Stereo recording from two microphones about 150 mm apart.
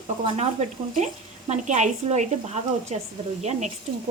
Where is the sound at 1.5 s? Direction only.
50° right (ahead or behind).